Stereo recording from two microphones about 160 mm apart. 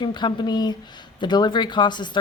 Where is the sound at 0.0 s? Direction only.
30° left (ahead or behind).